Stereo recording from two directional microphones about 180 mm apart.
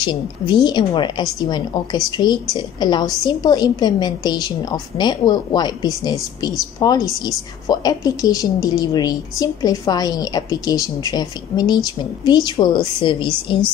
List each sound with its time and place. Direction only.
0.0 s a woman's voice: 25° left (ahead or behind)